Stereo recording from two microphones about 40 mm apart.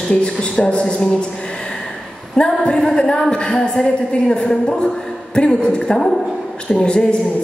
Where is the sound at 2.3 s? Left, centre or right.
Left.